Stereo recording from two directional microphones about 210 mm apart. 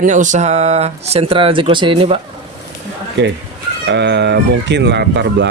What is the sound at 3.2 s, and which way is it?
Speech, 55° right (ahead or behind).